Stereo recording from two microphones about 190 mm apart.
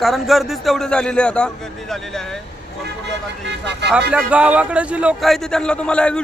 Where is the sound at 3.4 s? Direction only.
65° right (ahead or behind).